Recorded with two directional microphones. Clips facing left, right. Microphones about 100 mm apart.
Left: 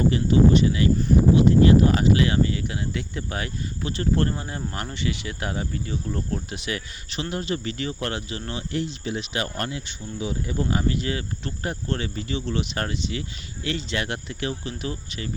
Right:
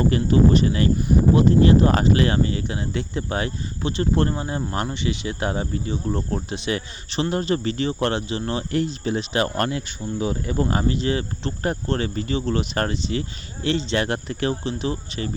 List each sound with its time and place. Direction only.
0.1 s speech: 45° right (ahead or behind)
8.7 s speech: 45° right (ahead or behind)
9.6 s speech: 55° right (ahead or behind)
10.8 s speech: 30° right (ahead or behind)
14.6 s speech: 30° right (ahead or behind)